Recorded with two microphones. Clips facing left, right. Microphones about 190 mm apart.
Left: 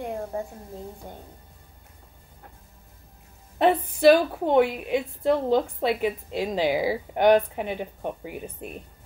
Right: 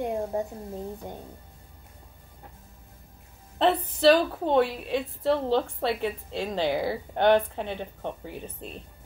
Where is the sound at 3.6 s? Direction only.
10° left (ahead or behind).